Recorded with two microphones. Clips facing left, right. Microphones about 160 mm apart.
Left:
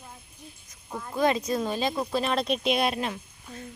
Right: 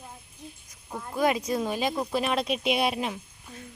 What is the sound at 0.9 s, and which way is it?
Speech, 5° right (ahead or behind).